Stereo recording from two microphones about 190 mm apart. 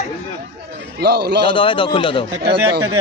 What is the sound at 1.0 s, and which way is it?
Speech, 55° right (ahead or behind).